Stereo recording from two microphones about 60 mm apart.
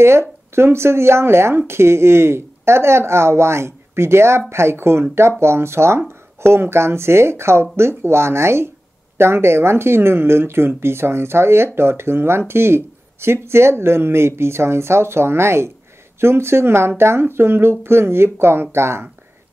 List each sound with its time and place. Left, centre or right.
0.0 s speech: right